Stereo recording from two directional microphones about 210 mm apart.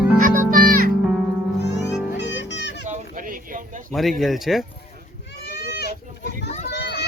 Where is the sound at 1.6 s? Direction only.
55° left (ahead or behind).